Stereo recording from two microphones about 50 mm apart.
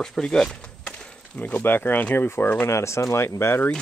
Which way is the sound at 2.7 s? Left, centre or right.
Left.